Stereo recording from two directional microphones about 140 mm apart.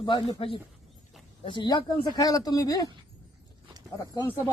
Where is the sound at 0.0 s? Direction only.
35° left (ahead or behind).